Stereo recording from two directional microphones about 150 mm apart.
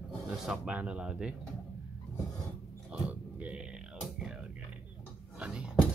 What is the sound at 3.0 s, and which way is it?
Music, 10° right (ahead or behind).